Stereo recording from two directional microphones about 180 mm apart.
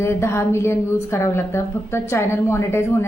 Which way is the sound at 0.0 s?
15° left (ahead or behind).